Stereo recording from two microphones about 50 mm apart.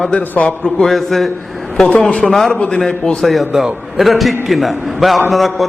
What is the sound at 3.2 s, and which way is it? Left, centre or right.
A man's voice, centre.